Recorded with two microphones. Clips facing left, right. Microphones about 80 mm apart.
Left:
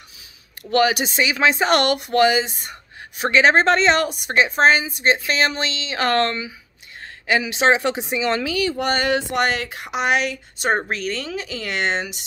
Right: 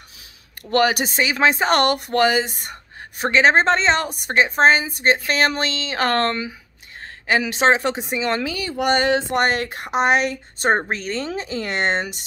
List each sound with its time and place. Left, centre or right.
0.7 s speech: right
8.7 s a sound: centre
9.3 s speech: right